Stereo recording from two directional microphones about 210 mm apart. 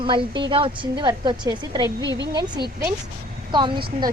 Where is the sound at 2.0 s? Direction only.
60° right (ahead or behind).